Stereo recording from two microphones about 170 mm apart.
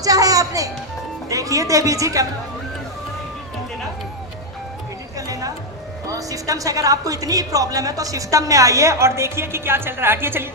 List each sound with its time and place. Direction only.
0.0 s a woman's voice: 20° right (ahead or behind)
5.1 s a sound: 20° right (ahead or behind)
6.1 s a woman's voice: 20° right (ahead or behind)